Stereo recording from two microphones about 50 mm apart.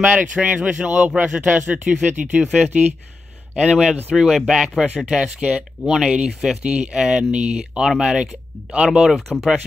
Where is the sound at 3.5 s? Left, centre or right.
Centre.